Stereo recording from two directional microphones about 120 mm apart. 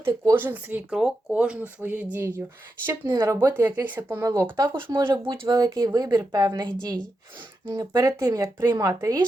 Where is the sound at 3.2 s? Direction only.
25° right (ahead or behind).